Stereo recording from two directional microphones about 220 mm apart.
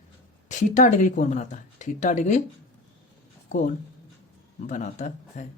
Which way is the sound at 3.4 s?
35° left (ahead or behind).